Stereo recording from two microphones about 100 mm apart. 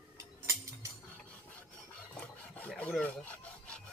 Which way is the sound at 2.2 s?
15° left (ahead or behind).